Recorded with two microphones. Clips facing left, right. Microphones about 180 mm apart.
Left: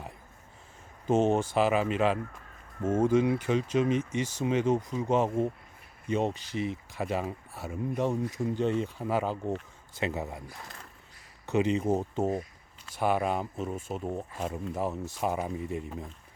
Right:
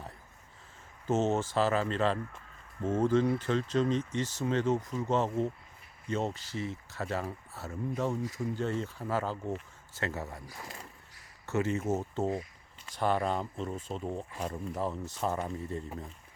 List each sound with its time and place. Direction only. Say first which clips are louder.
1.0 s speech: left 4 dB; 15° left (ahead or behind)
11.4 s speech: left 4 dB; 15° left (ahead or behind)